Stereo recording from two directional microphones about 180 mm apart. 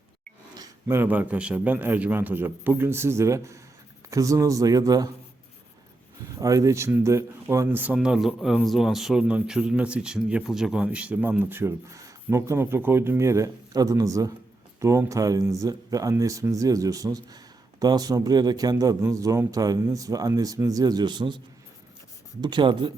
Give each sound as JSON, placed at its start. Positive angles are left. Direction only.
{"t": 0.5, "sound": "speech", "side_deg": -15}
{"t": 6.4, "sound": "speech", "side_deg": -20}